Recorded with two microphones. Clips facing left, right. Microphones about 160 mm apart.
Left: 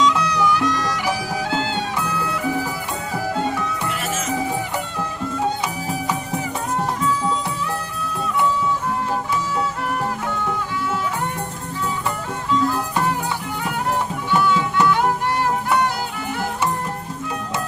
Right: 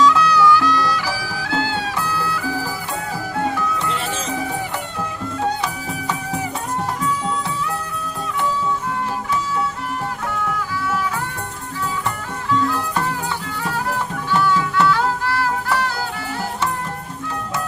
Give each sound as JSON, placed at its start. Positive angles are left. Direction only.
{"t": 0.0, "sound": "music", "side_deg": 20}
{"t": 3.8, "sound": "music", "side_deg": -30}
{"t": 14.3, "sound": "music", "side_deg": 20}